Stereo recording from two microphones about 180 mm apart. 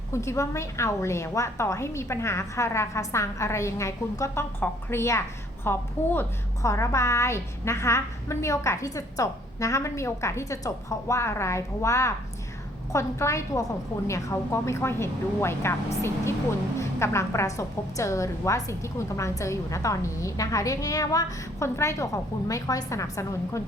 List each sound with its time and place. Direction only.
0.1 s a woman's voice: 15° left (ahead or behind)